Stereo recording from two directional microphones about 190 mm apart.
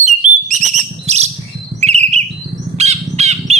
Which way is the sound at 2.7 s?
35° right (ahead or behind).